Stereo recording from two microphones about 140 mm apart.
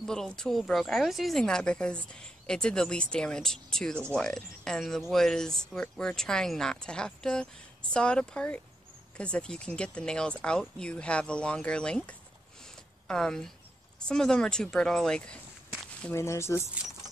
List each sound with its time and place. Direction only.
0.0 s speech: 5° left (ahead or behind)
16.0 s speech: 20° left (ahead or behind)